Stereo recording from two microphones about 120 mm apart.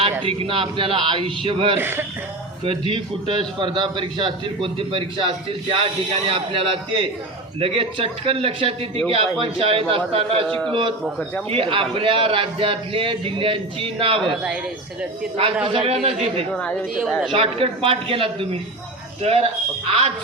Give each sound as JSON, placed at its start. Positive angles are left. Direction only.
{"t": 0.0, "sound": "a man's voice", "side_deg": -50}
{"t": 1.8, "sound": "speech", "side_deg": -20}
{"t": 2.6, "sound": "a man's voice", "side_deg": -45}
{"t": 6.2, "sound": "a man's voice", "side_deg": -50}
{"t": 15.6, "sound": "a man's voice", "side_deg": -50}
{"t": 16.5, "sound": "a woman's voice", "side_deg": 10}
{"t": 17.3, "sound": "a man's voice", "side_deg": -50}